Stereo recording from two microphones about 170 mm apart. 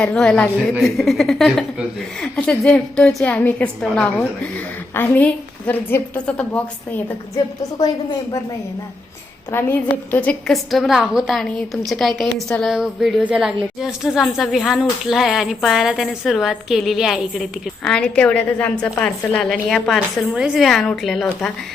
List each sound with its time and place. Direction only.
0.0 s a woman's voice: 5° left (ahead or behind)
7.3 s a woman's voice: 20° left (ahead or behind)
9.5 s speech: 15° left (ahead or behind)